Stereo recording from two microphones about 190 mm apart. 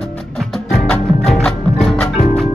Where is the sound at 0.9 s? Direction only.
5° left (ahead or behind).